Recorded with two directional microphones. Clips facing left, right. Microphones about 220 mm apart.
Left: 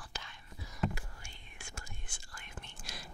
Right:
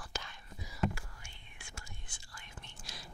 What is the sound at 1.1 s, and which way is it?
Whispering, 45° left (ahead or behind).